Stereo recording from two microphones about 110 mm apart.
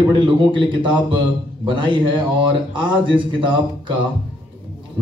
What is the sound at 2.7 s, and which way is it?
A man's voice, 50° right (ahead or behind).